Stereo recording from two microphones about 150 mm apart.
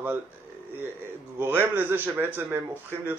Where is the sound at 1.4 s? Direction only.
15° right (ahead or behind).